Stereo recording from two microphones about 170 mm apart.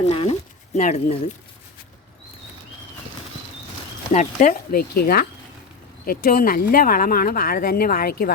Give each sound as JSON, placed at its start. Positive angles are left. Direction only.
{"t": 0.1, "sound": "speech", "side_deg": 35}
{"t": 4.1, "sound": "speech", "side_deg": 45}